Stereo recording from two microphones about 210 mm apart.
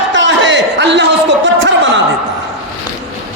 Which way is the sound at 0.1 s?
60° right (ahead or behind).